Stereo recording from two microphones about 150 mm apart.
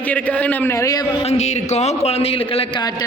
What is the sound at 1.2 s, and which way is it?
A man's voice, 50° left (ahead or behind).